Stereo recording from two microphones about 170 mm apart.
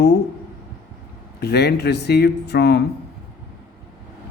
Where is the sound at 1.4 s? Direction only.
75° left (ahead or behind).